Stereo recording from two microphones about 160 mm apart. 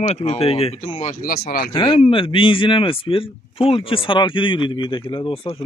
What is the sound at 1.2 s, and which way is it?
Speech, 65° left (ahead or behind).